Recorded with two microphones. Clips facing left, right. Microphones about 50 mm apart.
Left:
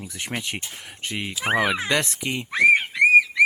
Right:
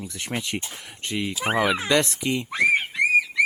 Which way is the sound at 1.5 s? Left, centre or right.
Left.